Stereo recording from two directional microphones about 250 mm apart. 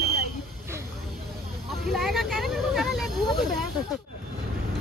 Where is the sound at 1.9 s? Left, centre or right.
Centre.